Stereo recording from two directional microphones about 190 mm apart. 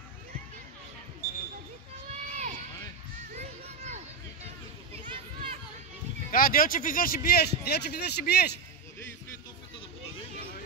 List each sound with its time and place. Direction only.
2.0 s run: 35° right (ahead or behind)
3.3 s a sound: 35° right (ahead or behind)
6.3 s speech: 50° left (ahead or behind)